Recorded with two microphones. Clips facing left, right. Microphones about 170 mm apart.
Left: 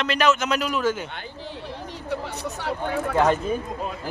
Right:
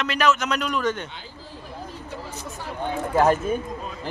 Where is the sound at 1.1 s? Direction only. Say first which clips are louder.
Left 5 dB; 70° left (ahead or behind).